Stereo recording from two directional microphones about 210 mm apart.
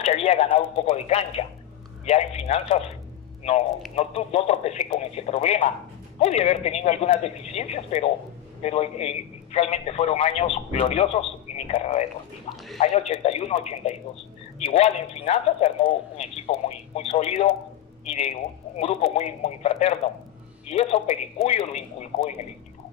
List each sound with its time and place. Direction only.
0.0 s a man's voice: 30° left (ahead or behind)
3.9 s a man's voice: 30° left (ahead or behind)
13.1 s a man's voice: 30° left (ahead or behind)